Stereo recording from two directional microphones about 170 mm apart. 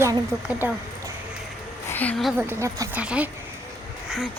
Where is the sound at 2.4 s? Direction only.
15° right (ahead or behind).